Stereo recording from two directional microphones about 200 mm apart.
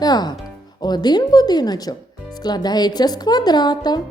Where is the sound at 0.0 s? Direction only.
20° left (ahead or behind).